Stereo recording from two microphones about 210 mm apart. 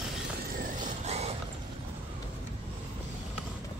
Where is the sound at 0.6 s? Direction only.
40° right (ahead or behind).